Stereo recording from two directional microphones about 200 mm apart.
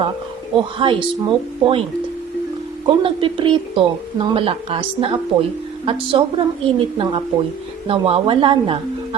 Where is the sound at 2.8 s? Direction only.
25° right (ahead or behind).